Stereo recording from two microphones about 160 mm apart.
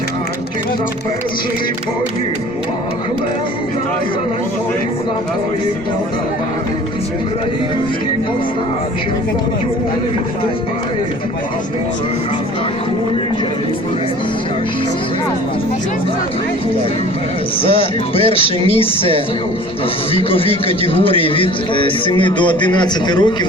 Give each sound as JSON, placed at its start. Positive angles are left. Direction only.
{"t": 17.6, "sound": "a man's voice", "side_deg": 35}
{"t": 20.1, "sound": "a man's voice", "side_deg": 35}